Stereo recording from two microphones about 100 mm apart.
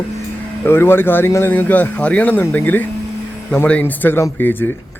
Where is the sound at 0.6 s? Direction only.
25° left (ahead or behind).